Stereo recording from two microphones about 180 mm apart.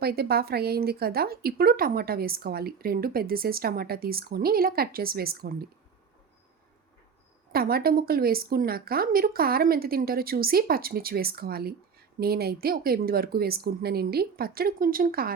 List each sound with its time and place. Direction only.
0.0 s a woman's voice: 60° right (ahead or behind)
7.5 s a woman's voice: 55° right (ahead or behind)